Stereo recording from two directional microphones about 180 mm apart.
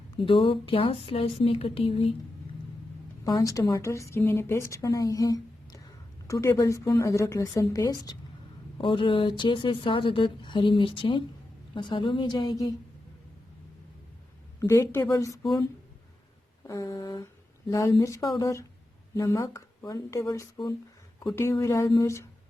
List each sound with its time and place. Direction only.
0.3 s speech: 30° left (ahead or behind)
3.2 s a woman's voice: 20° left (ahead or behind)
14.6 s a woman's voice: 15° left (ahead or behind)
16.6 s a woman's voice: 20° left (ahead or behind)